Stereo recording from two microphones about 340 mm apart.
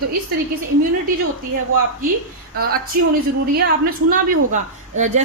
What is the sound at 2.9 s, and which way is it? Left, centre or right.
A woman's voice, right.